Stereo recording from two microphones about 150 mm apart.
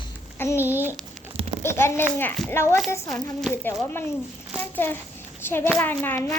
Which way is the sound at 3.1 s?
5° left (ahead or behind).